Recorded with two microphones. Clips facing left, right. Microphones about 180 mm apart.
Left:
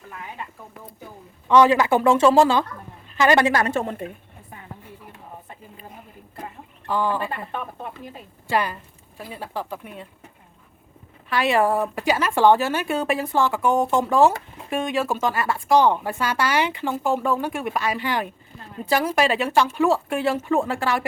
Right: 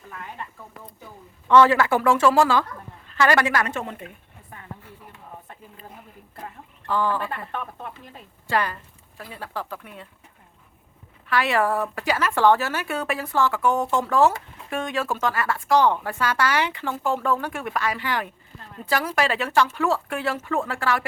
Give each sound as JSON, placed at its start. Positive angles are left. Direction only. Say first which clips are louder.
{"t": 0.1, "sound": "speech", "louder": "left 1 dB", "side_deg": 5}
{"t": 1.5, "sound": "speech", "louder": "left 1 dB", "side_deg": 15}
{"t": 6.4, "sound": "speech", "louder": "left 2 dB", "side_deg": 15}
{"t": 11.3, "sound": "speech", "louder": "left 2 dB", "side_deg": 20}